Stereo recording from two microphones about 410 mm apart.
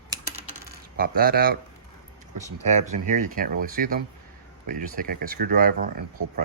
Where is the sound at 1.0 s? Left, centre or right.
Right.